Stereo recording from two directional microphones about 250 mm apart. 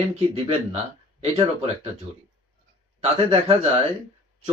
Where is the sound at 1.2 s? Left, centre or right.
Right.